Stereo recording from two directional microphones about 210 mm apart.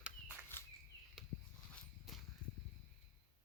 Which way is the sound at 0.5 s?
10° left (ahead or behind).